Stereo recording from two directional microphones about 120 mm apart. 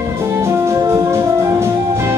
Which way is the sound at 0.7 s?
25° right (ahead or behind).